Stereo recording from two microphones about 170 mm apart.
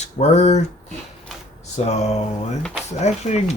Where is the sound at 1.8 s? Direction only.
40° left (ahead or behind).